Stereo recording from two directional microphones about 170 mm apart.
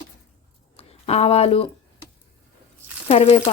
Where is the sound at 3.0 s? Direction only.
35° left (ahead or behind).